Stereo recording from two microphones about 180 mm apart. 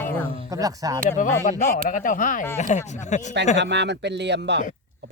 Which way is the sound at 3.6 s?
75° right (ahead or behind).